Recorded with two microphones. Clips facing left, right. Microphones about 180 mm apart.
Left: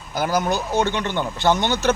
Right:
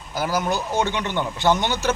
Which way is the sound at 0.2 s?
5° right (ahead or behind).